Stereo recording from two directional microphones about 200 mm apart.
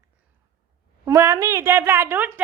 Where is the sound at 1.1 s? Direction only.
15° right (ahead or behind).